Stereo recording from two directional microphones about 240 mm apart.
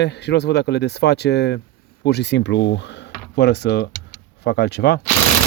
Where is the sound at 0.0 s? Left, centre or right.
Left.